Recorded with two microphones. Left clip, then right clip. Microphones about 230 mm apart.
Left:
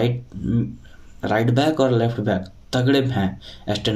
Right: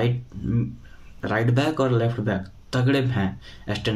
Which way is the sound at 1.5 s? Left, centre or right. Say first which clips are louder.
Left 5 dB; centre.